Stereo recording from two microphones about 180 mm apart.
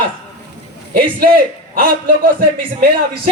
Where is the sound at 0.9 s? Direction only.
55° right (ahead or behind).